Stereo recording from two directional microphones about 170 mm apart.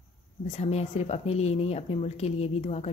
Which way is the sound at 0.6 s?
40° left (ahead or behind).